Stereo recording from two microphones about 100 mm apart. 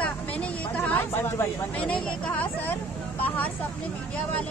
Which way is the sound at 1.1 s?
25° left (ahead or behind).